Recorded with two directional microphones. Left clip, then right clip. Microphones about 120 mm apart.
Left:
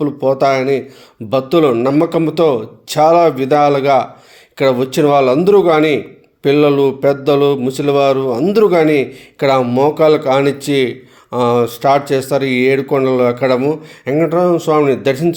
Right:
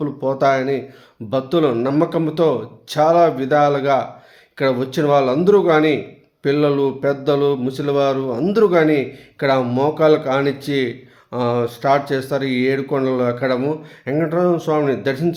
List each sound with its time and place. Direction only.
0.0 s speech: 10° left (ahead or behind)
9.6 s speech: 5° left (ahead or behind)